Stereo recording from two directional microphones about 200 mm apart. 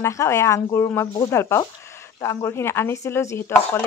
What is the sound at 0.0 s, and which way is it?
Speech, 15° left (ahead or behind).